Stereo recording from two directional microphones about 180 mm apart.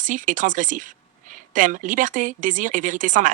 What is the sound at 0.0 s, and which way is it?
Speech, 45° right (ahead or behind).